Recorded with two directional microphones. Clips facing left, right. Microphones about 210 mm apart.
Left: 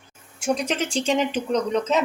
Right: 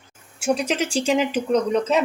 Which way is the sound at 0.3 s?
5° right (ahead or behind).